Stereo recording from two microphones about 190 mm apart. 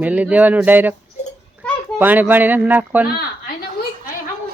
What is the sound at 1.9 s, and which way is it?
Speech, 10° right (ahead or behind).